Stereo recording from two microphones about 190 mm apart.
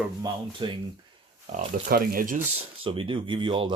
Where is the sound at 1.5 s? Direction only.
45° right (ahead or behind).